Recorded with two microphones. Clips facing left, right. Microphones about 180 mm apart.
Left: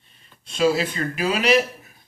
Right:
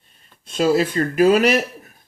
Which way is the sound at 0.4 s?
45° right (ahead or behind).